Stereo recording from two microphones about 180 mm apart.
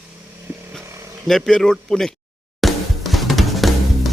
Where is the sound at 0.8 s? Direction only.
15° right (ahead or behind).